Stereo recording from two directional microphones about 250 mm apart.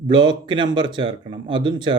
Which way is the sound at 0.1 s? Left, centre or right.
Centre.